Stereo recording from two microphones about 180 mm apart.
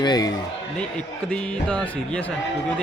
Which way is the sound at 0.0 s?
25° left (ahead or behind).